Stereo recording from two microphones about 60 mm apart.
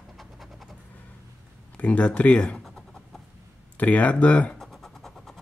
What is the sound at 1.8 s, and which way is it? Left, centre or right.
Speech, left.